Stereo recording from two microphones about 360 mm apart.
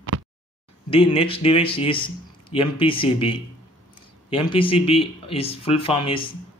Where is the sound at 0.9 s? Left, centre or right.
Centre.